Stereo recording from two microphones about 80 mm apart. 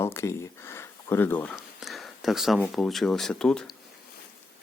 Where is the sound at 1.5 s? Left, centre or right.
Centre.